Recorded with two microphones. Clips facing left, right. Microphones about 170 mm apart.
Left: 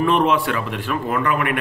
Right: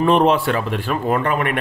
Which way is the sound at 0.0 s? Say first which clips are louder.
Right 3 dB; 30° right (ahead or behind).